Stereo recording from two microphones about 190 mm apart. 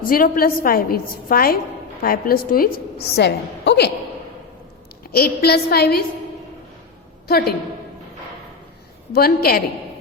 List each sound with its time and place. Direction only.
0.1 s a woman's voice: 50° left (ahead or behind)
5.1 s a woman's voice: 55° left (ahead or behind)
7.3 s a woman's voice: 55° left (ahead or behind)
9.1 s a woman's voice: 55° left (ahead or behind)